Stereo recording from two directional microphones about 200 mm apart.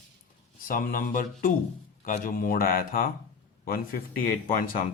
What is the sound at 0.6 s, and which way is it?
Speech, 40° left (ahead or behind).